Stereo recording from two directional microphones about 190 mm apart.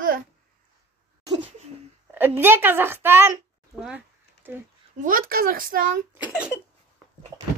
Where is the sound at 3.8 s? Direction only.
5° right (ahead or behind).